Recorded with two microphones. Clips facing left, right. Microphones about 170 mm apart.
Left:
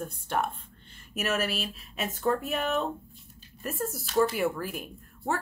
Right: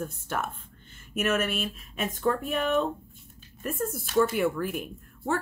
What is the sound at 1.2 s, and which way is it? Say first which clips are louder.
Speech: right 3 dB; 35° left (ahead or behind).